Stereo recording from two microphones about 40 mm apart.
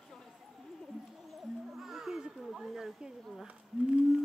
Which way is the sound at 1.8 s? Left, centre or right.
Centre.